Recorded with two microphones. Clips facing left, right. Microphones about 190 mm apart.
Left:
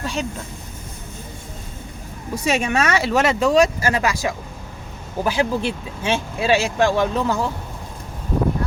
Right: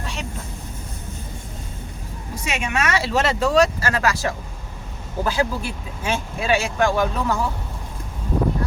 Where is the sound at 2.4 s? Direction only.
35° left (ahead or behind).